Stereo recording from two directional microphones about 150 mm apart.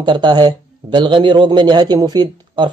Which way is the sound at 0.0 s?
30° right (ahead or behind).